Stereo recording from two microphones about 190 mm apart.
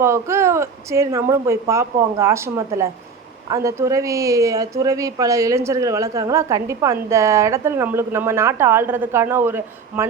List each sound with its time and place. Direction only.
0.0 s speech: 15° right (ahead or behind)